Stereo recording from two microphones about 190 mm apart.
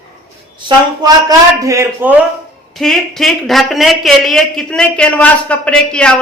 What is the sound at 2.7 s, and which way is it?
A man's voice, centre (ahead or behind).